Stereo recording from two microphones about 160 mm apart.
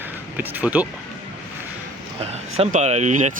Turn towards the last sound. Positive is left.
turn(degrees=-45)  # may be behind; listen again after turning